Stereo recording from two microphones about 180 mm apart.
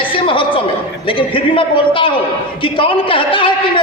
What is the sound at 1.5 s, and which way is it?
A woman's voice, 30° left (ahead or behind).